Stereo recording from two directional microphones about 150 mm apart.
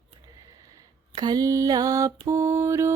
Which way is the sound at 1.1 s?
25° right (ahead or behind).